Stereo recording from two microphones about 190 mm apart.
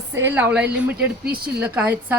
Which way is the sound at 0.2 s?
10° right (ahead or behind).